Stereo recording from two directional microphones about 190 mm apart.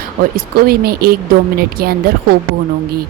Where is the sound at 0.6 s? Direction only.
55° right (ahead or behind).